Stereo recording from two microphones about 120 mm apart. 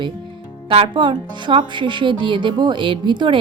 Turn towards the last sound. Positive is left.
turn(degrees=-40)  # may be behind; listen again after turning